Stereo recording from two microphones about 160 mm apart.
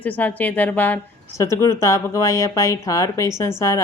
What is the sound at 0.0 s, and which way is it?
Speech, 10° left (ahead or behind).